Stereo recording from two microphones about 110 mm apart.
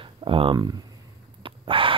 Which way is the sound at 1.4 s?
50° right (ahead or behind).